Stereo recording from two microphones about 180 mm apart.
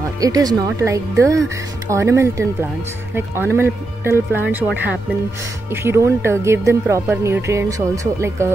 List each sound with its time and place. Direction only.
0.2 s speech: 20° right (ahead or behind)